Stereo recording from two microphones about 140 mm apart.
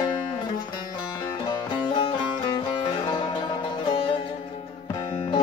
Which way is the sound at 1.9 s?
40° left (ahead or behind).